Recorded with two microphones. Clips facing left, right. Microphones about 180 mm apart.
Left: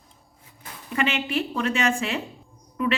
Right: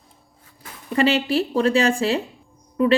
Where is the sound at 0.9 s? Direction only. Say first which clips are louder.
Right 6 dB; 35° right (ahead or behind).